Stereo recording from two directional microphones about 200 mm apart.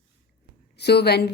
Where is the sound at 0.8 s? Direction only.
55° left (ahead or behind).